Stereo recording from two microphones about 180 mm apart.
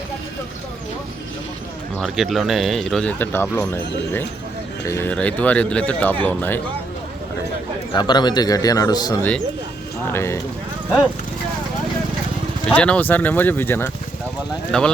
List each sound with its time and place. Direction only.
2.0 s speech: centre (ahead or behind)
4.9 s speech: 10° left (ahead or behind)
7.9 s a man's voice: 25° left (ahead or behind)
12.6 s speech: 5° left (ahead or behind)